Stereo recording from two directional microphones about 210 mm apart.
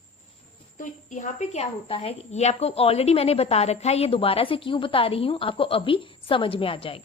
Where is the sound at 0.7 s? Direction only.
35° left (ahead or behind).